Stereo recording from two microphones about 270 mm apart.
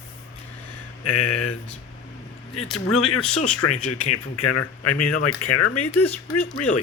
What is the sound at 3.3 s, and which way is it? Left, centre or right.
Speech, left.